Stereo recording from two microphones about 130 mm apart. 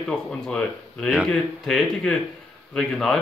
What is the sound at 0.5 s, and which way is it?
Speech, 5° left (ahead or behind).